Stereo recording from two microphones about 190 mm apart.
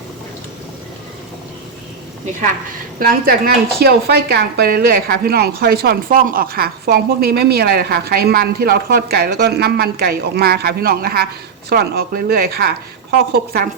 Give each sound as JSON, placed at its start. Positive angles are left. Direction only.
{"t": 3.0, "sound": "speech", "side_deg": -50}